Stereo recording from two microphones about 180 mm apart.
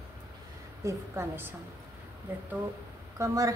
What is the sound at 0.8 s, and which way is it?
Speech, 15° right (ahead or behind).